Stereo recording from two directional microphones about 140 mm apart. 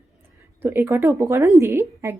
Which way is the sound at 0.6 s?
15° right (ahead or behind).